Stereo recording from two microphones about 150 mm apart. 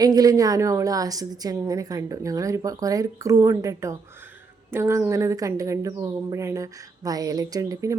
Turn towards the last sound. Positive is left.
turn(degrees=-20)  # may be behind; listen again after turning